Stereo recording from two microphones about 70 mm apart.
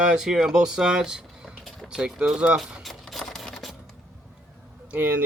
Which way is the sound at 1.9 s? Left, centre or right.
Centre.